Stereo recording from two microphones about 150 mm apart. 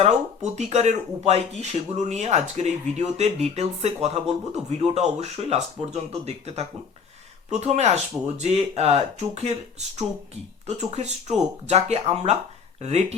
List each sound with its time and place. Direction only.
0.5 s speech: 50° right (ahead or behind)